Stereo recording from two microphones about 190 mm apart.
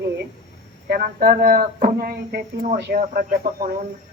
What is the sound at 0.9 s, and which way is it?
Speech, 55° right (ahead or behind).